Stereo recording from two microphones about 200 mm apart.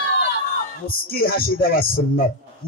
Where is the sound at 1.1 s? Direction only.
45° left (ahead or behind).